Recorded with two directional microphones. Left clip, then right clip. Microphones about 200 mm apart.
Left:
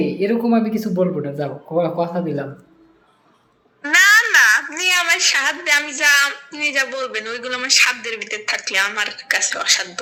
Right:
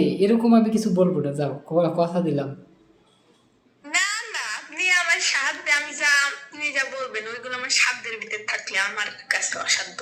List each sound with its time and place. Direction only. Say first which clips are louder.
0.0 s speech: left 1 dB; 5° right (ahead or behind)
4.5 s a woman's voice: left 5 dB; 20° left (ahead or behind)